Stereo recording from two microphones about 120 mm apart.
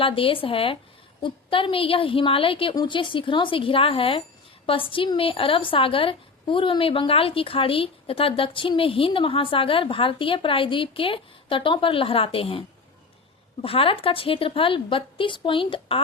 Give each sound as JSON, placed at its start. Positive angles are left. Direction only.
{"t": 0.0, "sound": "a woman's voice", "side_deg": 50}